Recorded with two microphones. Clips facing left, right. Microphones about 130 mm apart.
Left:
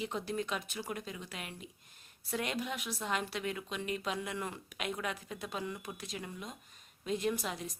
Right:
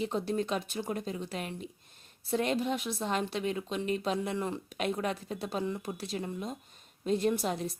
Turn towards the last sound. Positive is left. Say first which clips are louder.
# right 6 dB
turn(degrees=-35)  # may be behind; listen again after turning